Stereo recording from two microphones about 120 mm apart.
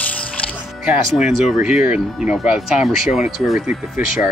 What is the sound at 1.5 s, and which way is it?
Speech, 5° right (ahead or behind).